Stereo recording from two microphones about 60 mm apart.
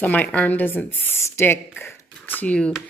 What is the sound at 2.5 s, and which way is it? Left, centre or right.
Speech, centre.